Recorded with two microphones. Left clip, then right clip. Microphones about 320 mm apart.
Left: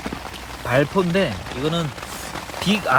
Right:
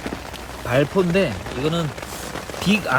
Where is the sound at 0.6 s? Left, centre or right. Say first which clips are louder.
Even; centre.